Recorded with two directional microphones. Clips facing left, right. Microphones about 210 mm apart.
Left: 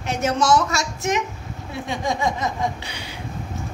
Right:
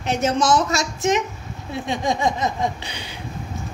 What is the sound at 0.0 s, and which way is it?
A woman's voice, 20° right (ahead or behind).